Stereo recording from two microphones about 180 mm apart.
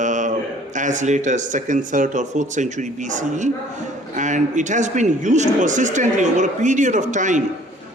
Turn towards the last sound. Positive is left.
turn(degrees=-45)  # may be behind; listen again after turning